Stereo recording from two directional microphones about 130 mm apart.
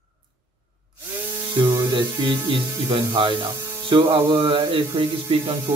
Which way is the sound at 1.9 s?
40° right (ahead or behind).